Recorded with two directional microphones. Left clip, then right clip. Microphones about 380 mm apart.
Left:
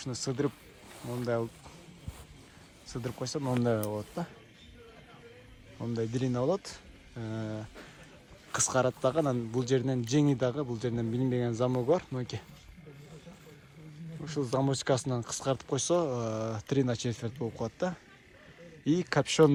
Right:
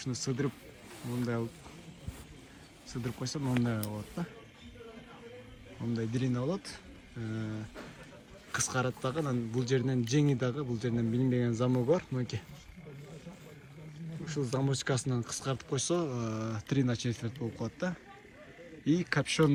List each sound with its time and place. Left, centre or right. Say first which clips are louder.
0.0 s a man's voice: left 2 dB; centre
2.9 s speech: left 3 dB; centre
5.9 s speech: left 2 dB; centre
8.5 s a man's voice: left 5 dB; centre
14.3 s a man's voice: left 4 dB; centre